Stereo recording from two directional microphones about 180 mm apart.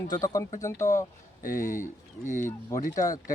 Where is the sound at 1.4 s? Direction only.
45° left (ahead or behind).